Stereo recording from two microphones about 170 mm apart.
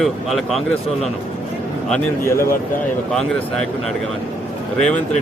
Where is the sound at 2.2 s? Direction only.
15° left (ahead or behind).